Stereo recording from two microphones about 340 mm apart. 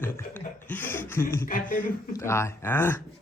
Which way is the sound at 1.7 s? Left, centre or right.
Left.